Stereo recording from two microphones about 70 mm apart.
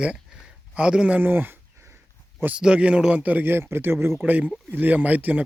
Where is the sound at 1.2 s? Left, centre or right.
Right.